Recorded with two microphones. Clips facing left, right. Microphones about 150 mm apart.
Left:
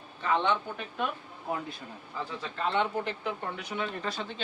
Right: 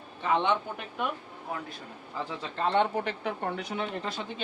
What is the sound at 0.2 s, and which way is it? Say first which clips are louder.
Speech: right 1 dB; 15° right (ahead or behind).